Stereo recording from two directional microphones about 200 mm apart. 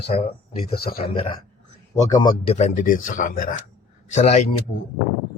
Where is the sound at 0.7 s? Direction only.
50° left (ahead or behind).